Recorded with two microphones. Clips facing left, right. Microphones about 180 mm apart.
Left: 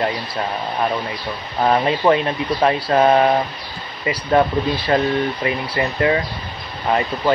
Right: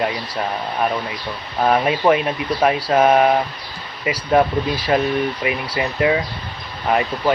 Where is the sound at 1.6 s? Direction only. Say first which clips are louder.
Even; 10° right (ahead or behind).